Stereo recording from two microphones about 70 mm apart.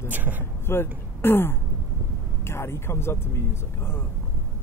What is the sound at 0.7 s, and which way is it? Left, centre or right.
Speech, left.